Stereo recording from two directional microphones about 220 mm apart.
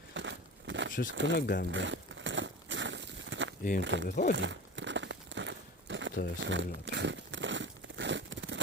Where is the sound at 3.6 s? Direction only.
40° left (ahead or behind).